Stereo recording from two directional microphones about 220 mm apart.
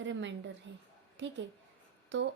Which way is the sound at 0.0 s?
55° right (ahead or behind).